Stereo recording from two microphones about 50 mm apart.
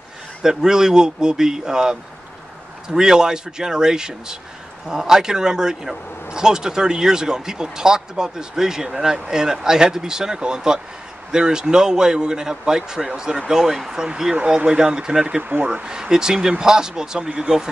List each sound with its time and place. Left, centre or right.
0.4 s speech: centre
15.2 s speech: right
15.6 s speech: centre